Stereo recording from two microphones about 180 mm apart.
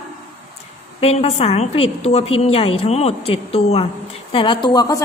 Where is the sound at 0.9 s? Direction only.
35° left (ahead or behind).